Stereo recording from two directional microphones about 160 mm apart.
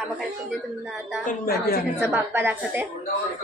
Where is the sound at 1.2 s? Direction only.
55° left (ahead or behind).